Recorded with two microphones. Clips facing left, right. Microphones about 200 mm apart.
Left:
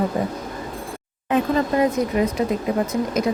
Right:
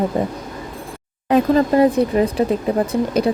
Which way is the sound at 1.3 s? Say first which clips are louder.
Right 5 dB; 35° right (ahead or behind).